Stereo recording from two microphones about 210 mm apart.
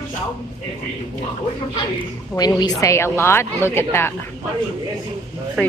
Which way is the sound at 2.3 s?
20° left (ahead or behind).